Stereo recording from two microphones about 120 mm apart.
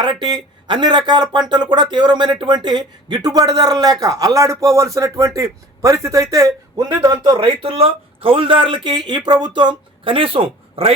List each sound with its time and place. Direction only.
0.0 s speech: 40° right (ahead or behind)
7.3 s speech: 50° right (ahead or behind)